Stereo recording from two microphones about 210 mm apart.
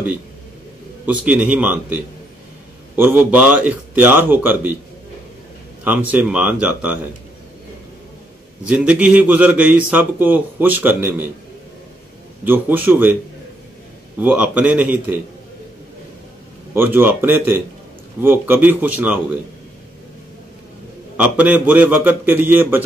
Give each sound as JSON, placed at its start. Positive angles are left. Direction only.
{"t": 1.0, "sound": "a man's voice", "side_deg": -5}
{"t": 3.0, "sound": "a man's voice", "side_deg": -5}
{"t": 5.9, "sound": "a man's voice", "side_deg": -5}
{"t": 8.6, "sound": "a man's voice", "side_deg": -5}
{"t": 12.4, "sound": "a man's voice", "side_deg": -10}
{"t": 14.1, "sound": "a man's voice", "side_deg": -5}
{"t": 16.7, "sound": "a man's voice", "side_deg": -10}
{"t": 21.2, "sound": "a man's voice", "side_deg": -5}